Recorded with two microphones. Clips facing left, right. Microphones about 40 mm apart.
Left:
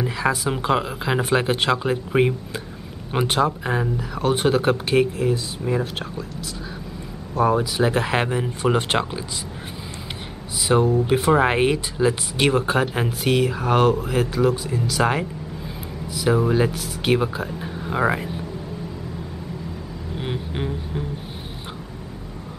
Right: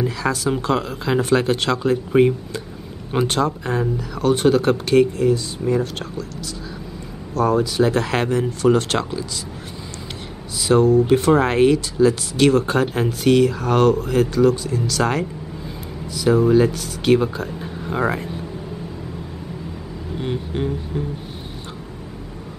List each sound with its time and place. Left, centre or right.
0.0 s speech: centre
7.3 s speech: centre
10.7 s speech: centre
20.2 s music: centre